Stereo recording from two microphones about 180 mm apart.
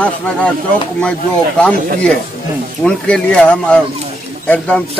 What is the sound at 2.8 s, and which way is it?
A man's voice, 5° left (ahead or behind).